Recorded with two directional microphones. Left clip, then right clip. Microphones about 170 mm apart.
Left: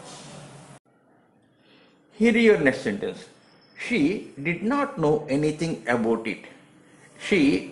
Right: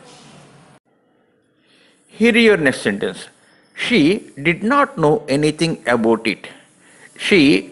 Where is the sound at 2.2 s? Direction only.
20° right (ahead or behind).